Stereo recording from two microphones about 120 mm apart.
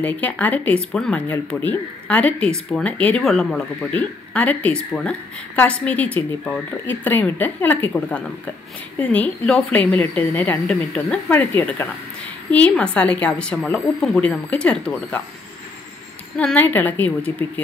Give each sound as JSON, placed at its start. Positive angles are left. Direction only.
{"t": 0.0, "sound": "speech", "side_deg": 15}
{"t": 10.7, "sound": "speech", "side_deg": 5}
{"t": 11.3, "sound": "speech", "side_deg": 15}
{"t": 16.3, "sound": "speech", "side_deg": 10}